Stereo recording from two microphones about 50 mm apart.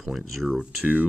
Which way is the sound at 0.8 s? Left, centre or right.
Right.